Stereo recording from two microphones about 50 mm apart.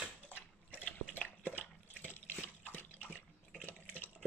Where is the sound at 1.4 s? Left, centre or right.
Left.